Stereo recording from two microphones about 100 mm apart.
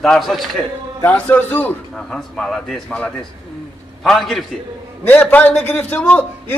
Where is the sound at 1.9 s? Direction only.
5° left (ahead or behind).